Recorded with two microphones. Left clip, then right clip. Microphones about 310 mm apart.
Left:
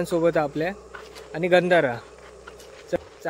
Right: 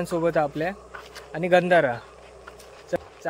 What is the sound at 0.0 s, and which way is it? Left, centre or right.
Speech, centre.